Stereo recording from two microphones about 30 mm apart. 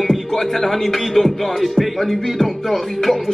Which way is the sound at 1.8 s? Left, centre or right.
Centre.